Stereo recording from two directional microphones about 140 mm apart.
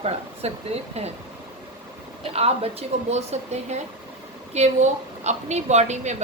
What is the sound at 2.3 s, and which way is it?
A woman's voice, 45° right (ahead or behind).